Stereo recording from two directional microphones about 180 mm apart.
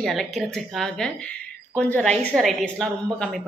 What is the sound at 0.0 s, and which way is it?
A woman's voice, centre (ahead or behind).